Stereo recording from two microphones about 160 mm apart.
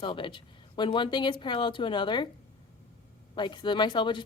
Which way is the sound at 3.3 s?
30° left (ahead or behind).